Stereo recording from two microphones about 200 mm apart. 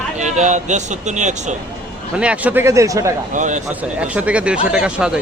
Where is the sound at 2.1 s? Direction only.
5° right (ahead or behind).